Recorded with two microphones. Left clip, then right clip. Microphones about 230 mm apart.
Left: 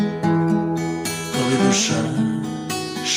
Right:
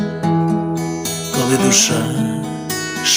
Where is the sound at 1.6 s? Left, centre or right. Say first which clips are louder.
Right 5 dB; right.